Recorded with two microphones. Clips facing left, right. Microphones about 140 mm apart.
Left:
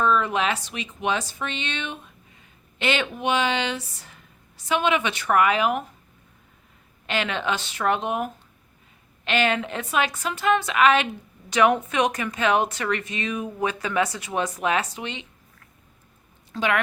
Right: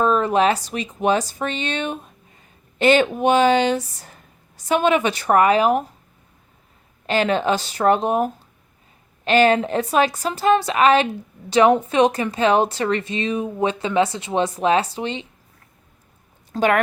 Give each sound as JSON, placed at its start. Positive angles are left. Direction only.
{"t": 0.0, "sound": "a woman's voice", "side_deg": -40}
{"t": 7.1, "sound": "a woman's voice", "side_deg": -40}
{"t": 16.5, "sound": "speech", "side_deg": -45}